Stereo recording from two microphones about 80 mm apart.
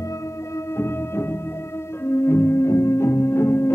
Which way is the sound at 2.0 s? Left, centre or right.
Left.